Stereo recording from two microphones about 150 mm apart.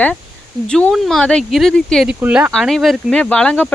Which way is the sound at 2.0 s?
10° right (ahead or behind).